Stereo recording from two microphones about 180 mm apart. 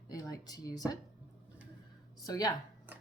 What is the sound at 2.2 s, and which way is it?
Speech, 20° left (ahead or behind).